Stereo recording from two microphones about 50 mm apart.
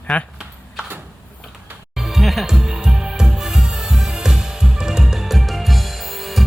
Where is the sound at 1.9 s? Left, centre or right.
Centre.